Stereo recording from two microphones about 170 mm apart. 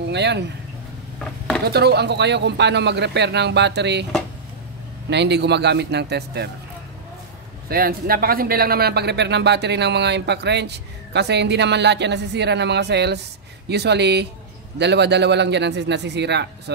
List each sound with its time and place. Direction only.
0.1 s speech: 90° right
1.7 s speech: 75° right (ahead or behind)
5.1 s speech: 85° right
7.7 s a man's voice: 60° right (ahead or behind); by 16.7 s 85° right